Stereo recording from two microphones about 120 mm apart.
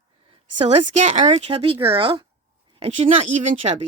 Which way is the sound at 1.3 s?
55° right (ahead or behind).